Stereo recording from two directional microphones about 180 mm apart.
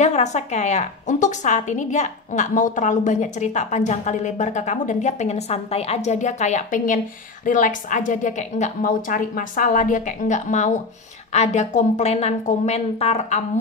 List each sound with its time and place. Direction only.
0.0 s a woman's voice: 40° left (ahead or behind)